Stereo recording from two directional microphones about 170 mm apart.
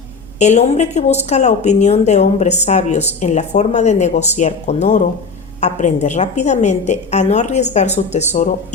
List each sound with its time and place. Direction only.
0.3 s a woman's voice: 40° left (ahead or behind)